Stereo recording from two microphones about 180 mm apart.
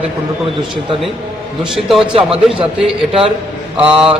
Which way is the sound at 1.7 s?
Centre (ahead or behind).